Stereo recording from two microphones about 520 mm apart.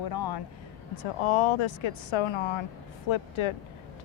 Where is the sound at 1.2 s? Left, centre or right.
Left.